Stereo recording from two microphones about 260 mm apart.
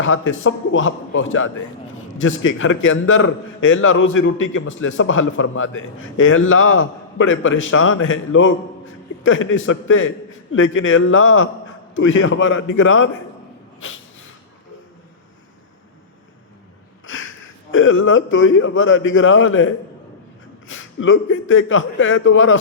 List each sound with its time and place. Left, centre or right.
0.0 s a man's voice: left
13.7 s snort: left
17.7 s a man's voice: left